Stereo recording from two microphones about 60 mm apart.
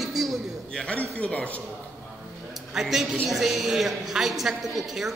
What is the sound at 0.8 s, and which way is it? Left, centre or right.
Speech, left.